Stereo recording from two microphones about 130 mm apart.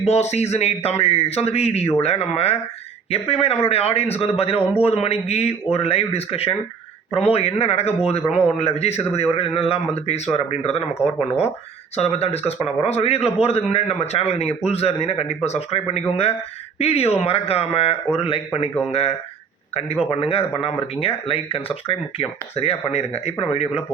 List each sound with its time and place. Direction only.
0.0 s speech: 55° left (ahead or behind)
11.9 s speech: 50° left (ahead or behind)